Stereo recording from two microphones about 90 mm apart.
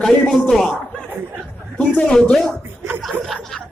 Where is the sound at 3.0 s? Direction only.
Centre (ahead or behind).